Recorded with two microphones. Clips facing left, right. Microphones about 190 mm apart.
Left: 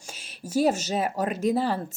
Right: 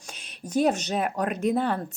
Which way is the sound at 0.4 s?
5° left (ahead or behind).